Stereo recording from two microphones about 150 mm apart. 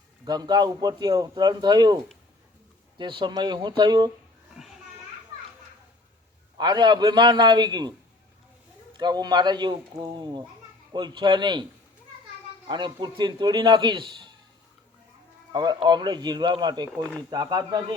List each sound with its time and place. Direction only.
0.3 s a man's voice: 25° right (ahead or behind)
3.0 s a man's voice: 30° right (ahead or behind)
4.6 s children playing: 5° right (ahead or behind)
6.6 s a man's voice: 30° right (ahead or behind)
9.0 s a man's voice: 30° right (ahead or behind)
12.6 s speech: 30° right (ahead or behind)
15.5 s a man's voice: 30° right (ahead or behind)